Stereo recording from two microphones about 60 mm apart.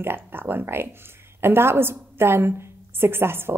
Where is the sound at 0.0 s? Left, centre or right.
Right.